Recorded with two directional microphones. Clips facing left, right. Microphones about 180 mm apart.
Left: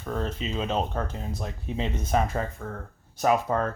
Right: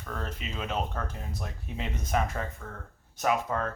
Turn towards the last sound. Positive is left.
turn(degrees=35)  # may be behind; listen again after turning